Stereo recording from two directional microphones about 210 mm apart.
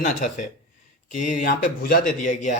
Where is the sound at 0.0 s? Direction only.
35° left (ahead or behind).